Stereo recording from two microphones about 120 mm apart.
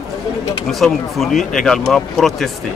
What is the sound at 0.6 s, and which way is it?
Speech, centre (ahead or behind).